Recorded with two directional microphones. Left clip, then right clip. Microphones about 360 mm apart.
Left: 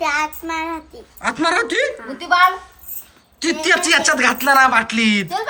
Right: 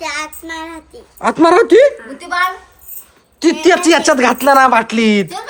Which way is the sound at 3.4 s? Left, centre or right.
Centre.